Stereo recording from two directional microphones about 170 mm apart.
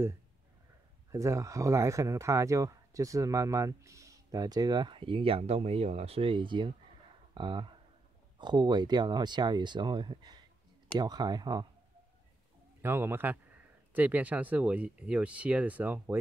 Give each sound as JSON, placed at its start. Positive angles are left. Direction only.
{"t": 1.1, "sound": "speech", "side_deg": -20}
{"t": 12.8, "sound": "speech", "side_deg": -15}